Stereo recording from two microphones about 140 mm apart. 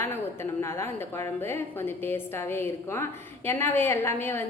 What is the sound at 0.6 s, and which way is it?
A woman's voice, 20° left (ahead or behind).